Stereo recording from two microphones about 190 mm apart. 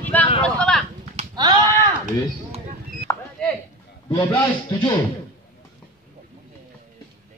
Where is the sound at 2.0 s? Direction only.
40° right (ahead or behind).